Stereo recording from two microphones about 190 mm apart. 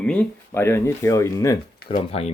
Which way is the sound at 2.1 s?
35° left (ahead or behind).